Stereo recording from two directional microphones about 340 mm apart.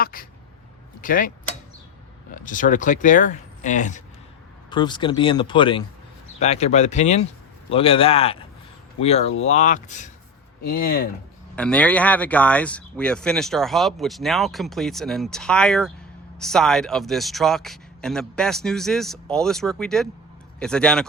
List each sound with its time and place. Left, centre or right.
0.0 s speech: left
2.3 s speech: left
11.5 s speech: centre